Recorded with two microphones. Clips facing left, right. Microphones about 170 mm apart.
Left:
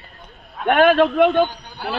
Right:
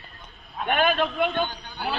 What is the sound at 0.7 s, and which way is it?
Speech, 70° left (ahead or behind).